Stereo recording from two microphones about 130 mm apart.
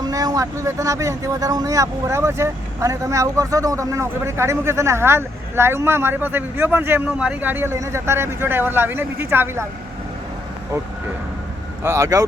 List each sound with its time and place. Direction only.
0.0 s speech: 30° right (ahead or behind)
11.8 s speech: 20° right (ahead or behind)